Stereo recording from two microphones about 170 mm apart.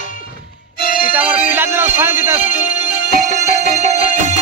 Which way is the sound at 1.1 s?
10° right (ahead or behind).